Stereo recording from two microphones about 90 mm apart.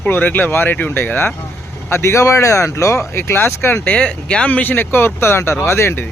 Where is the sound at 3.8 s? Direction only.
15° left (ahead or behind).